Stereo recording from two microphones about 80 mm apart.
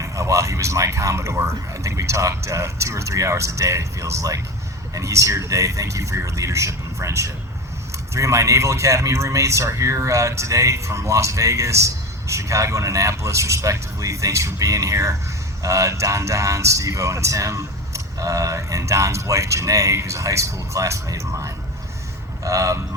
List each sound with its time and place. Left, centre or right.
0.0 s speech: right